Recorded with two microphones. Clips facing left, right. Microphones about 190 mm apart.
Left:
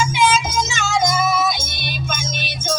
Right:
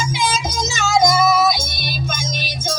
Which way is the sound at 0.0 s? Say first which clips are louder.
Left 4 dB; 35° right (ahead or behind).